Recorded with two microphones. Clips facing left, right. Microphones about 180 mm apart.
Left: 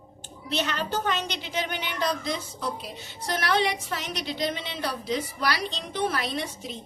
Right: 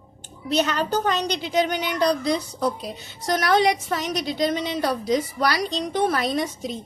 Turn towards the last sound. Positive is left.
turn(degrees=-45)  # may be behind; listen again after turning